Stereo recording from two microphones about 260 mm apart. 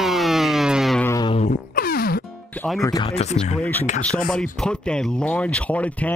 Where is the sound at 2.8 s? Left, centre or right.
Centre.